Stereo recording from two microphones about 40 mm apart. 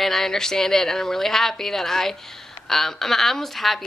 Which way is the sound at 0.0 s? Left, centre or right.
Centre.